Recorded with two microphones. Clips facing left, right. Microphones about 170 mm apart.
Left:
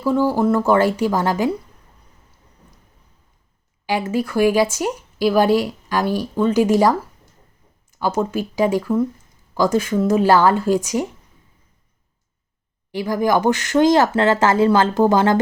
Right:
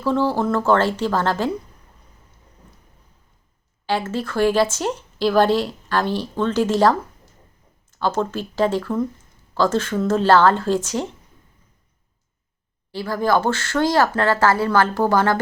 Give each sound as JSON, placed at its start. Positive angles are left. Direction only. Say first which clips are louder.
{"t": 0.0, "sound": "speech", "louder": "left 3 dB", "side_deg": 10}
{"t": 3.8, "sound": "speech", "louder": "left 2 dB", "side_deg": 15}
{"t": 7.9, "sound": "speech", "louder": "left 2 dB", "side_deg": 10}
{"t": 12.9, "sound": "speech", "louder": "left 2 dB", "side_deg": 15}